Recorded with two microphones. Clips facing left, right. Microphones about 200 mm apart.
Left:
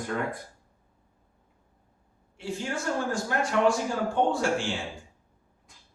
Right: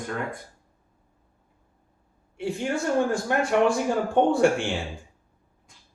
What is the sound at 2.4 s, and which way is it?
Speech, 60° right (ahead or behind).